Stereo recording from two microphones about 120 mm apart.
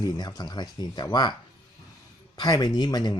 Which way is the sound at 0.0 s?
35° left (ahead or behind).